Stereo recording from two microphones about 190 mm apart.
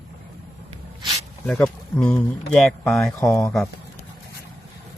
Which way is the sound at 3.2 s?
15° left (ahead or behind).